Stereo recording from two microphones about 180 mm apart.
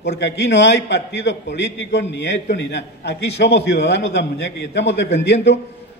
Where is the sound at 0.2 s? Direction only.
70° left (ahead or behind).